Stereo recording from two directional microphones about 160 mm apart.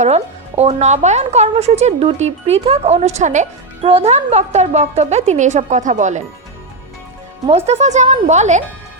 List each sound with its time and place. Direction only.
0.0 s speech: 40° right (ahead or behind)
7.4 s speech: 40° right (ahead or behind)